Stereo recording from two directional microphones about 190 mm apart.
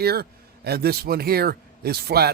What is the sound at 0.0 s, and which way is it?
A man's voice, 55° right (ahead or behind).